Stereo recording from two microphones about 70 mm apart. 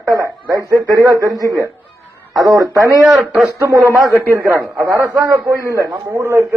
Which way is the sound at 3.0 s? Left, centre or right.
Centre.